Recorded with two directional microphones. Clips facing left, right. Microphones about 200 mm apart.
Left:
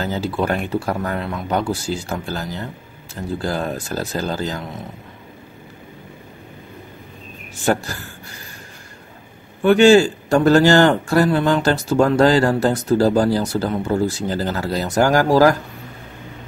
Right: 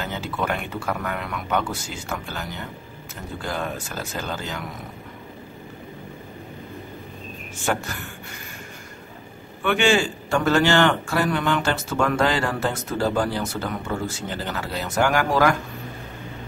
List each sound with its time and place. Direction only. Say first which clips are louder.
0.0 s speech: left 6 dB; 35° left (ahead or behind)
7.6 s speech: left 6 dB; 35° left (ahead or behind)
9.6 s speech: left 9 dB; 40° left (ahead or behind)